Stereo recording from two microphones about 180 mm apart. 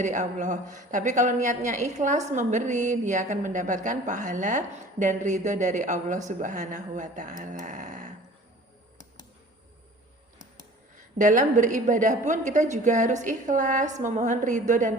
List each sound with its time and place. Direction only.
0.0 s a woman's voice: 45° right (ahead or behind)
11.2 s a woman's voice: 45° right (ahead or behind)